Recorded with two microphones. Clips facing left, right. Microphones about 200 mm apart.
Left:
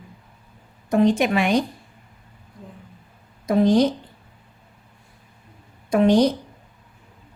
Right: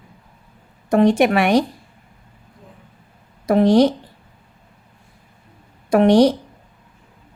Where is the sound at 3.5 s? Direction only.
70° right (ahead or behind).